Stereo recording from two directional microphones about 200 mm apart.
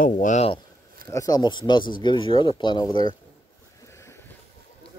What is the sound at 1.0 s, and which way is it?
Speech, 15° left (ahead or behind).